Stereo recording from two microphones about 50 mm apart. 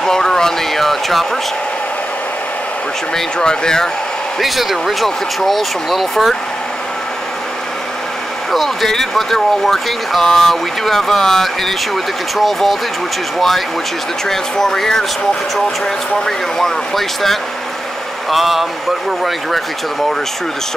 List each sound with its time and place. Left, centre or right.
0.0 s a sound: centre
3.2 s speech: centre
4.4 s speech: centre
8.5 s speech: centre
14.3 s speech: centre
16.3 s speech: centre